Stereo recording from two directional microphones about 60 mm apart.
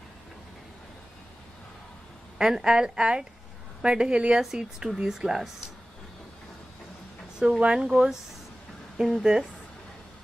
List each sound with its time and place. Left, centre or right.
2.3 s speech: centre
7.3 s speech: centre